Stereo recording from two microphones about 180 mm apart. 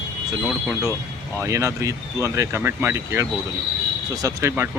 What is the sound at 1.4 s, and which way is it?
Speech, 15° right (ahead or behind).